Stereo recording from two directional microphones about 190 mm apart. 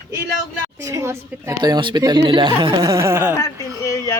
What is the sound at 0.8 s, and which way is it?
A woman's voice, 15° right (ahead or behind).